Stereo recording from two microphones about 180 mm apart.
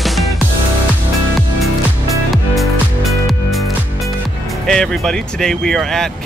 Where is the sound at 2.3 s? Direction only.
Centre (ahead or behind).